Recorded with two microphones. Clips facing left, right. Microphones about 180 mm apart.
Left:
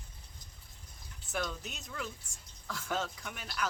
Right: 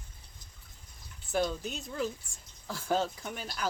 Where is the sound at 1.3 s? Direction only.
30° right (ahead or behind).